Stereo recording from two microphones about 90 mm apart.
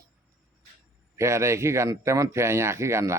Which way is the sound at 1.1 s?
30° right (ahead or behind).